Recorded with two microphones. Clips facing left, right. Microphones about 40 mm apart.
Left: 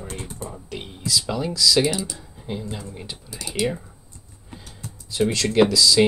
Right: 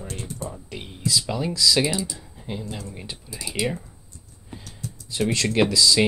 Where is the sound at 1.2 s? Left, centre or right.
Centre.